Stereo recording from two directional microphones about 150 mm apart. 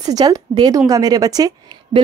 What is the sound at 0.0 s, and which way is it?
Speech, 25° right (ahead or behind).